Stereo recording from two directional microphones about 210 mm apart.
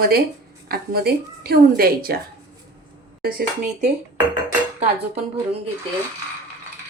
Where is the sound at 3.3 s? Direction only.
35° right (ahead or behind).